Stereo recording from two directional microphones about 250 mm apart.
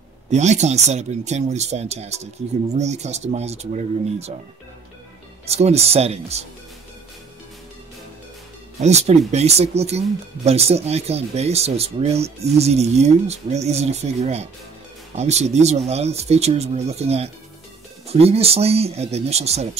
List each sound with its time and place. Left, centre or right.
0.3 s speech: right
5.4 s speech: right
8.7 s speech: right